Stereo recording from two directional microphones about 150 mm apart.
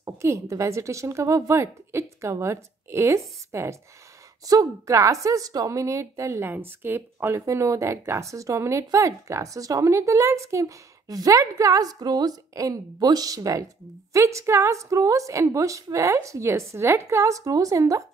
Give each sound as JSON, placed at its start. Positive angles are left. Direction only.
{"t": 0.0, "sound": "a woman's voice", "side_deg": -20}